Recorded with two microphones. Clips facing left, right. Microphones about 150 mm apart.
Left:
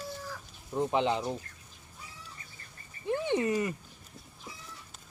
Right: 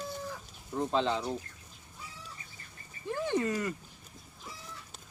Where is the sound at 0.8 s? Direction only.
15° left (ahead or behind).